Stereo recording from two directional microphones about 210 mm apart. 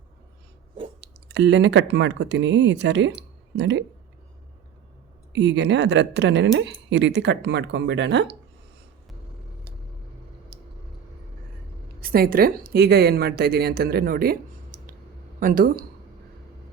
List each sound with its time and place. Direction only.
1.0 s speech: 55° right (ahead or behind)
5.3 s speech: 55° right (ahead or behind)
10.5 s a sound: 50° right (ahead or behind)
11.9 s speech: 45° right (ahead or behind)